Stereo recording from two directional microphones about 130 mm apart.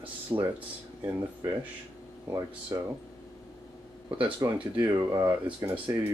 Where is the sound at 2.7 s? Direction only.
30° right (ahead or behind).